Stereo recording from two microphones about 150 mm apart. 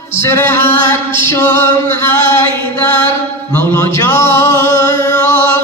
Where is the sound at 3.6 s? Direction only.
20° left (ahead or behind).